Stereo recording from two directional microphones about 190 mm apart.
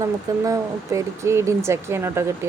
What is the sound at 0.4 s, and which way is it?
Speech, 15° right (ahead or behind).